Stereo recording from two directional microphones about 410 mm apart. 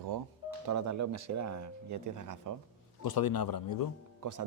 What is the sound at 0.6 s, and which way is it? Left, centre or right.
Speech, right.